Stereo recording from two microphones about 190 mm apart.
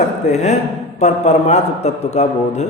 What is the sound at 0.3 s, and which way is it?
A man's voice, 35° left (ahead or behind).